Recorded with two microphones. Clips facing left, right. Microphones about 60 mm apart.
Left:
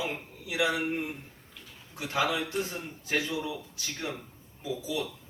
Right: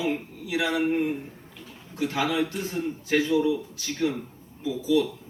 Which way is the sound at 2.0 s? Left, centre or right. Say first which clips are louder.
Right 4 dB; left.